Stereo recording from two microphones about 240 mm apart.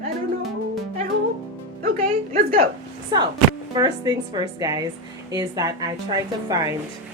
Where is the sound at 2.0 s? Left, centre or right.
Right.